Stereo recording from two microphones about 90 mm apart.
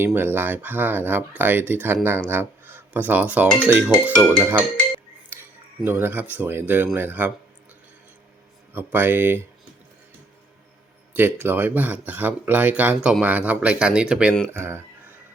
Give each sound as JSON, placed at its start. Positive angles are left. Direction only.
{"t": 0.0, "sound": "speech", "side_deg": -25}
{"t": 5.3, "sound": "a sound", "side_deg": -30}
{"t": 5.8, "sound": "speech", "side_deg": -25}
{"t": 8.7, "sound": "speech", "side_deg": -25}
{"t": 11.1, "sound": "speech", "side_deg": -25}
{"t": 14.5, "sound": "speech", "side_deg": -25}